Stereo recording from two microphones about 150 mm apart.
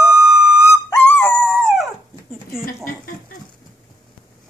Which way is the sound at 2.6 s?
70° left (ahead or behind).